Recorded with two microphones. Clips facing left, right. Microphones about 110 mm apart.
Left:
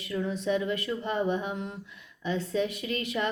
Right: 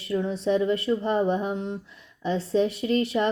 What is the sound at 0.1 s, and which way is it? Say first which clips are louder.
A woman's voice: right 4 dB; 30° right (ahead or behind).